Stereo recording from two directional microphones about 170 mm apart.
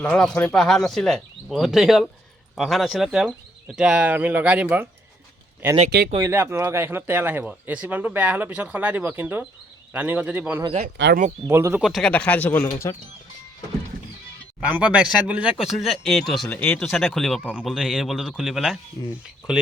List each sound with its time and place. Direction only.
0.0 s speech: 5° left (ahead or behind)
6.1 s speech: 15° right (ahead or behind)
10.9 s speech: 90° right
11.4 s speech: 15° right (ahead or behind)
11.9 s speech: 5° left (ahead or behind)
14.6 s speech: 5° right (ahead or behind)
16.5 s speech: 10° left (ahead or behind)
16.8 s speech: centre (ahead or behind)